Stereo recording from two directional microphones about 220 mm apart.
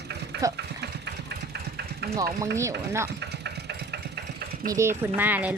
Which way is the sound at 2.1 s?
15° right (ahead or behind).